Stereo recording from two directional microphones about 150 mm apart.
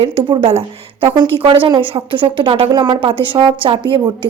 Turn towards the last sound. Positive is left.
turn(degrees=-35)  # may be behind; listen again after turning